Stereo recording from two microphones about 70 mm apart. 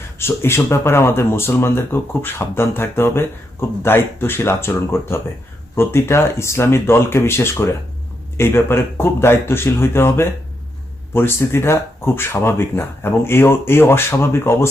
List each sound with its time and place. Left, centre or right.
0.2 s speech: left